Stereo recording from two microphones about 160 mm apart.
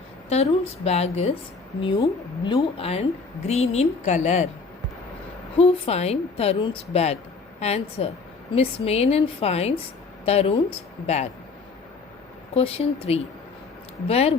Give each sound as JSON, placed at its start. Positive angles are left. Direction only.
{"t": 0.3, "sound": "a woman's voice", "side_deg": 40}
{"t": 2.0, "sound": "a woman's voice", "side_deg": 30}
{"t": 5.5, "sound": "a woman's voice", "side_deg": 40}
{"t": 12.5, "sound": "a woman's voice", "side_deg": 40}